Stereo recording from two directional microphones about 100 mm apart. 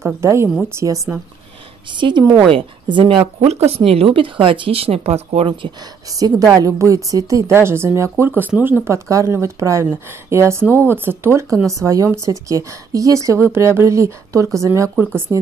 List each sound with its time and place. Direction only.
0.0 s a woman's voice: 30° right (ahead or behind)
1.9 s speech: 50° right (ahead or behind)
3.3 s speech: 90° right
6.0 s a woman's voice: 35° right (ahead or behind)